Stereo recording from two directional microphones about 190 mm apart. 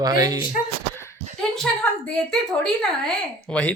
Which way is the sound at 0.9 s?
15° left (ahead or behind).